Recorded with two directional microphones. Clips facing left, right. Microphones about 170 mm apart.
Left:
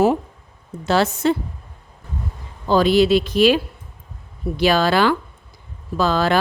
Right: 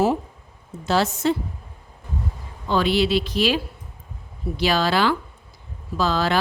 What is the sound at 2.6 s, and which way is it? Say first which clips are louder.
Speech: left 5 dB; 40° left (ahead or behind).